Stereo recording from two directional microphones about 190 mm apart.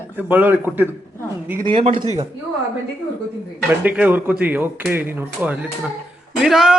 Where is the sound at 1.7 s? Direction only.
30° right (ahead or behind).